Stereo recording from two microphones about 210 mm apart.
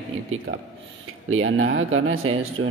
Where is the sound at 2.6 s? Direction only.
65° right (ahead or behind).